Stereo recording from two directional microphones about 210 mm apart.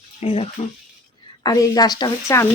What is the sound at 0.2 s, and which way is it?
Speech, 30° left (ahead or behind).